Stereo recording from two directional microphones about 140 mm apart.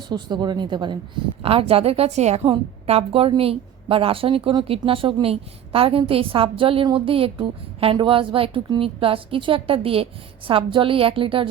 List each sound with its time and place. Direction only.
0.1 s a woman's voice: 30° right (ahead or behind)